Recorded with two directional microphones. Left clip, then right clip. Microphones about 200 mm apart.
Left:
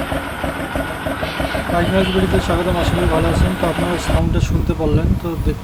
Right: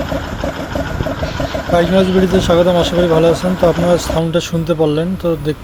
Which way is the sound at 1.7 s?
30° right (ahead or behind).